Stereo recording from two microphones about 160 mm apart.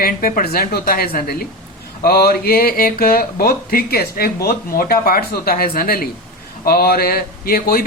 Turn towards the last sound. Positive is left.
turn(degrees=70)  # may be behind; listen again after turning